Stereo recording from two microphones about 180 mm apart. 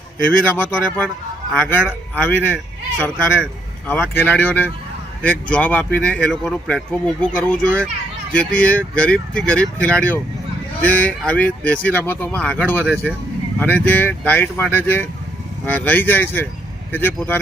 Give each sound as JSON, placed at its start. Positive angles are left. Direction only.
{"t": 0.2, "sound": "speech", "side_deg": 50}
{"t": 0.5, "sound": "a man's voice", "side_deg": 5}